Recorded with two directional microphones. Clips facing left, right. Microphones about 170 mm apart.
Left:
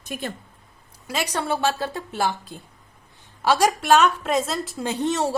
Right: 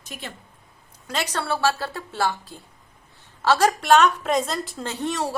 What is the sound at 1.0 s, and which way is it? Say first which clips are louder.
A woman's voice: left 1 dB; 10° left (ahead or behind).